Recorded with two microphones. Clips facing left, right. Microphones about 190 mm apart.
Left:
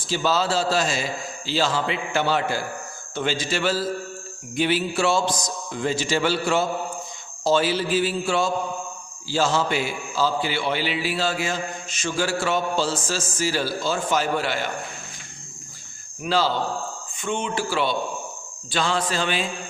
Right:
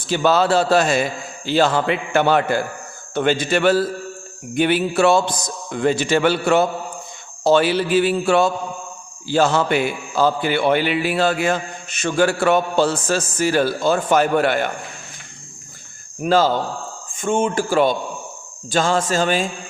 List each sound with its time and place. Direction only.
0.1 s a man's voice: 60° right (ahead or behind)
16.2 s a man's voice: 45° right (ahead or behind)